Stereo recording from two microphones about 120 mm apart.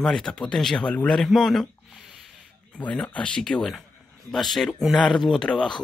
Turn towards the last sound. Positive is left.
turn(degrees=5)  # may be behind; listen again after turning